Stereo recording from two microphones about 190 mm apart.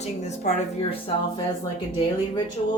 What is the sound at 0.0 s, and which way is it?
A woman's voice, 35° left (ahead or behind).